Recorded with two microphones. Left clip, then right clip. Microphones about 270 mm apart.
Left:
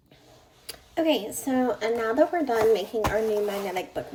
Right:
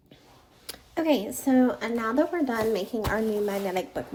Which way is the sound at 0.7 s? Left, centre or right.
Right.